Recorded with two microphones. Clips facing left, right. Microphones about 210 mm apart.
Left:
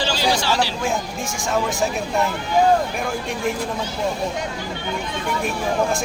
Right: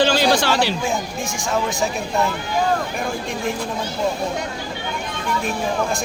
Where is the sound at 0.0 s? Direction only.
55° right (ahead or behind).